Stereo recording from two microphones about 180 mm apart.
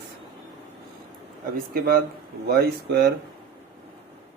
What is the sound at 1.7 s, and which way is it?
A man's voice, 55° right (ahead or behind).